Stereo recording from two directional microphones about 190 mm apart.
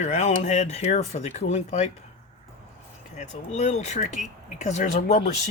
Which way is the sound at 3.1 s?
35° left (ahead or behind).